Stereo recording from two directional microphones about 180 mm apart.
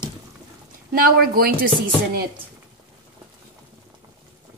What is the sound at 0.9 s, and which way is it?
Speech, 55° right (ahead or behind).